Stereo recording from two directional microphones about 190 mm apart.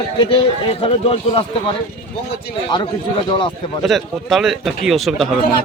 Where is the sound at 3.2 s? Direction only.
25° left (ahead or behind).